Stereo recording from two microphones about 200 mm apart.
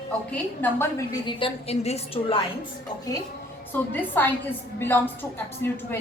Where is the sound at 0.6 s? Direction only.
15° left (ahead or behind); by 2.4 s 30° left (ahead or behind).